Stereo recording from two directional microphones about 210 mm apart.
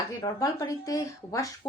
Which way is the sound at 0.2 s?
15° left (ahead or behind).